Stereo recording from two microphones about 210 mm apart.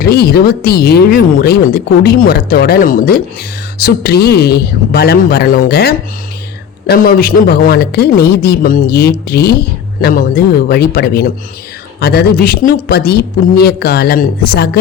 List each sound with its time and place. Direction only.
0.0 s speech: 45° left (ahead or behind)